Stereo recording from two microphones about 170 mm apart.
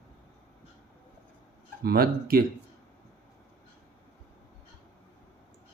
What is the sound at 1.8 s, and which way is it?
Speech, 65° right (ahead or behind).